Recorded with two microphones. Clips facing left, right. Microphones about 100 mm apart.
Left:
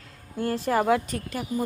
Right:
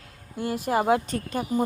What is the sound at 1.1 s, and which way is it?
Speech, 40° right (ahead or behind).